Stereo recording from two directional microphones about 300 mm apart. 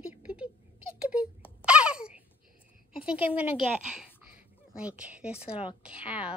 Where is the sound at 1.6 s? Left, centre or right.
Centre.